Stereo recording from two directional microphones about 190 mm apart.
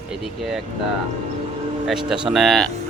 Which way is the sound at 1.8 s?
Centre (ahead or behind).